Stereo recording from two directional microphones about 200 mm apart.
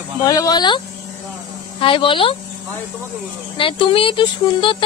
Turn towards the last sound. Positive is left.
turn(degrees=25)  # may be behind; listen again after turning